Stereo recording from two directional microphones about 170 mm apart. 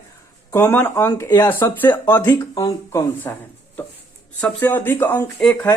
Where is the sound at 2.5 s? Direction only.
20° left (ahead or behind).